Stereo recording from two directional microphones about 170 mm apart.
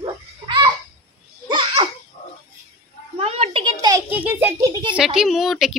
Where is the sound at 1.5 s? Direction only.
30° right (ahead or behind).